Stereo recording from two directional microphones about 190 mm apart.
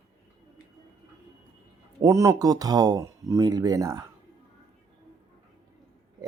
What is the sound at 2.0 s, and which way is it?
Speech, 15° right (ahead or behind).